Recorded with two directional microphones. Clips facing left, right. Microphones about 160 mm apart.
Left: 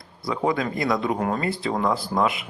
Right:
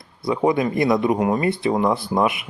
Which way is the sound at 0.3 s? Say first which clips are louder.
Right 5 dB; 20° right (ahead or behind).